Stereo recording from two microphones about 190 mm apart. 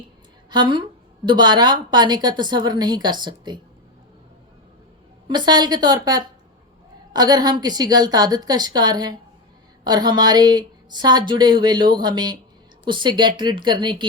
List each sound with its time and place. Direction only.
0.5 s a woman's voice: 25° right (ahead or behind)
5.3 s a woman's voice: 20° right (ahead or behind)